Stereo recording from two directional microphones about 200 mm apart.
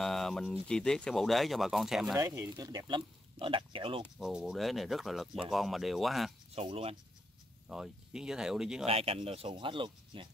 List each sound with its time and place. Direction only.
0.0 s speech: centre (ahead or behind)
2.1 s speech: 15° right (ahead or behind)
4.2 s speech: centre (ahead or behind)
6.5 s speech: 30° right (ahead or behind)
7.6 s speech: 5° right (ahead or behind)
8.8 s speech: 30° right (ahead or behind)